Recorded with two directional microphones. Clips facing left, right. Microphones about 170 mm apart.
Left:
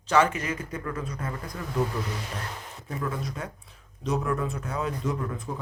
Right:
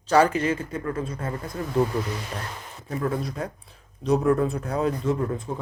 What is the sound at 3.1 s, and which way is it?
Speech, 35° right (ahead or behind).